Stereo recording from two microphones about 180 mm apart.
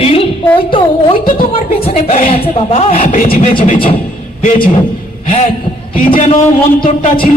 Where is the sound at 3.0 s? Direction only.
50° left (ahead or behind).